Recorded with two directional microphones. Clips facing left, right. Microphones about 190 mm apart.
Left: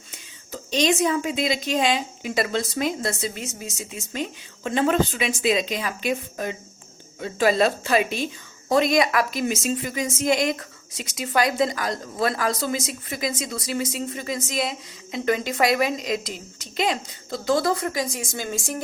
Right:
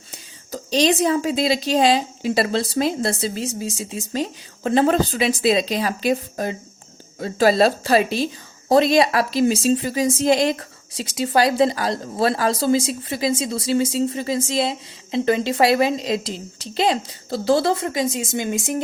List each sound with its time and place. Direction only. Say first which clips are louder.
0.1 s a woman's voice: right 5 dB; 35° right (ahead or behind); by 18.8 s 20° right (ahead or behind)